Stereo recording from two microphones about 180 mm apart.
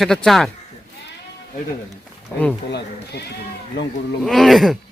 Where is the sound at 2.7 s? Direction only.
65° left (ahead or behind).